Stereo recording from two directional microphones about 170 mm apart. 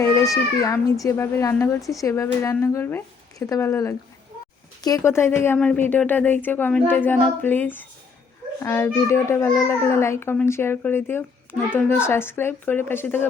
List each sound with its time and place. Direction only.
0.0 s a woman's voice: 20° left (ahead or behind)